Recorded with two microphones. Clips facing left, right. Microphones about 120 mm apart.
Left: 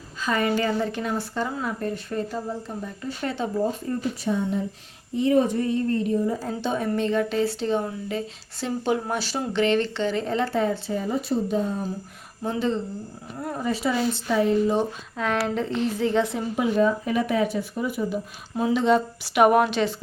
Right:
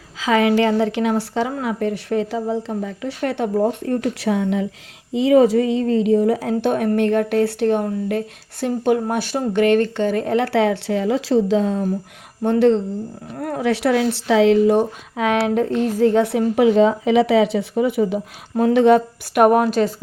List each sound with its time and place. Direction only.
0.2 s speech: 90° right
12.4 s speech: 65° right (ahead or behind); by 19.9 s 45° right (ahead or behind)